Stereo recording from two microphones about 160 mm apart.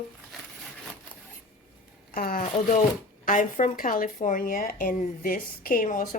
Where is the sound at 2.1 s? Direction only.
60° left (ahead or behind).